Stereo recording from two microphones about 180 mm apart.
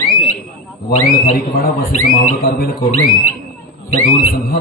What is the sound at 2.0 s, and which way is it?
Speech, 50° left (ahead or behind).